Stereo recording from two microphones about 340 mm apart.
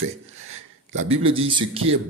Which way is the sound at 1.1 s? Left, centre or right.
Centre.